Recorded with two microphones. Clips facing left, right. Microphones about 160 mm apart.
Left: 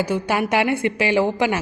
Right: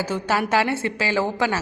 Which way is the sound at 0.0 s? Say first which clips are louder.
Left 2 dB; 15° left (ahead or behind).